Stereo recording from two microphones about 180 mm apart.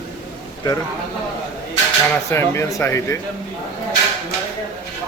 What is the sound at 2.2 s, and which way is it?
Speech, 15° left (ahead or behind).